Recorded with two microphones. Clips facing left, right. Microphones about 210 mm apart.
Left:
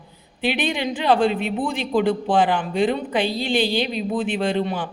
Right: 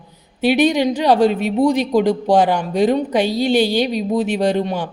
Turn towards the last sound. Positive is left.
turn(degrees=-40)  # may be behind; listen again after turning